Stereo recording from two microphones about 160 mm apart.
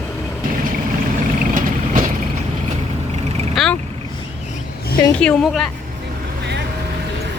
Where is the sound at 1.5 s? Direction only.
55° right (ahead or behind).